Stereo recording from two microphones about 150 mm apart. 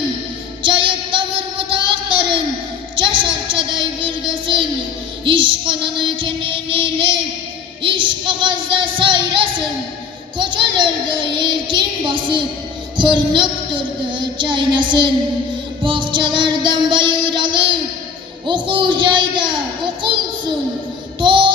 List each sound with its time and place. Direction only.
0.6 s child singing: 35° right (ahead or behind)
5.2 s music: 35° right (ahead or behind)